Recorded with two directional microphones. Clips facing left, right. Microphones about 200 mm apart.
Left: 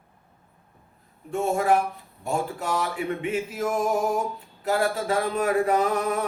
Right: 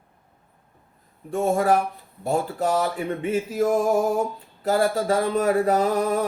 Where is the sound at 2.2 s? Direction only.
40° right (ahead or behind).